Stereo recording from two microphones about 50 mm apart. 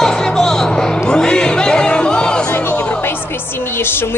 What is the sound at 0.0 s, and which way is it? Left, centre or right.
Music, centre.